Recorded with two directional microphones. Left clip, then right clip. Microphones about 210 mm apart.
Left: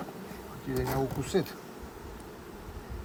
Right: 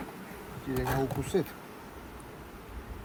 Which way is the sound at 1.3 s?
10° left (ahead or behind).